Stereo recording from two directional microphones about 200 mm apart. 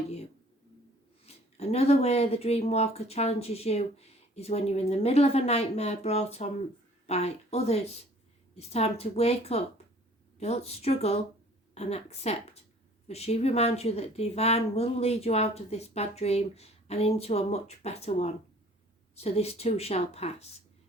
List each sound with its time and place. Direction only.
1.3 s speech: 30° left (ahead or behind)